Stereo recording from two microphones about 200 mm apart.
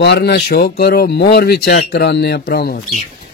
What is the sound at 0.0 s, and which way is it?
Speech, 55° left (ahead or behind).